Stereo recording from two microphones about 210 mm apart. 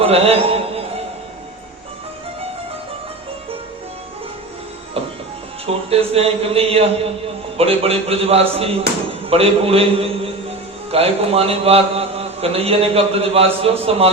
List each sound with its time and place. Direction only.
0.0 s a sound: 30° right (ahead or behind)
5.0 s music: 30° right (ahead or behind)
5.6 s a man's voice: 30° right (ahead or behind)